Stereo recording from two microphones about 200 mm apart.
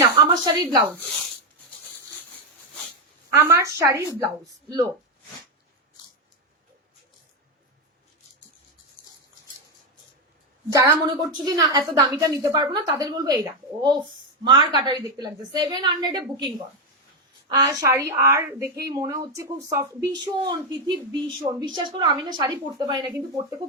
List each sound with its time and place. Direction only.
0.0 s a sound: 20° right (ahead or behind)
3.3 s a woman's voice: 15° right (ahead or behind)
10.8 s a woman's voice: 20° right (ahead or behind)
17.5 s a woman's voice: 20° right (ahead or behind)